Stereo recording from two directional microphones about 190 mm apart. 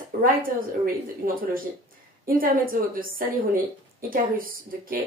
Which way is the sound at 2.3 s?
50° right (ahead or behind).